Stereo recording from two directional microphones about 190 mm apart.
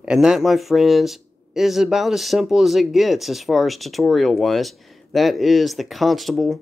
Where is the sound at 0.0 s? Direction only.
5° right (ahead or behind).